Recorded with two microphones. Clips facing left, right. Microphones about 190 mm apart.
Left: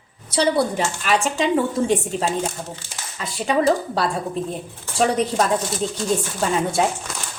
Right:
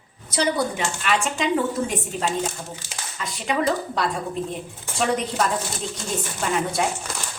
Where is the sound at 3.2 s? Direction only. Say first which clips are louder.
Left 4 dB; 35° left (ahead or behind).